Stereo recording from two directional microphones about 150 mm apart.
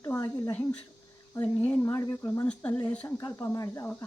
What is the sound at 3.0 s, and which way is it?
Speech, 20° left (ahead or behind).